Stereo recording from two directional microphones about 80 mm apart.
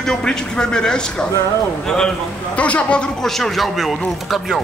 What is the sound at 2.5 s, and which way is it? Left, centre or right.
Speech, centre.